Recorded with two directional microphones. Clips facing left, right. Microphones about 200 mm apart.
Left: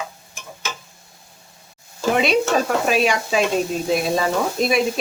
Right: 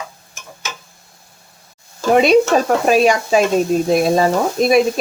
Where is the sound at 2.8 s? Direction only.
40° right (ahead or behind).